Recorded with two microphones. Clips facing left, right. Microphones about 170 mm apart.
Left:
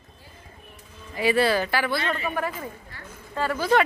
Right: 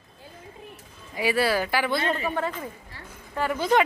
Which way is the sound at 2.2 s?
30° right (ahead or behind).